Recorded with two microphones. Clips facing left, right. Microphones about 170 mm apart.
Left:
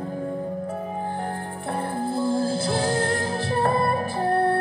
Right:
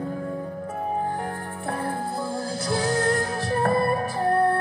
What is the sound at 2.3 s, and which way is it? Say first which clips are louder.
Music: left 4 dB; 30° left (ahead or behind).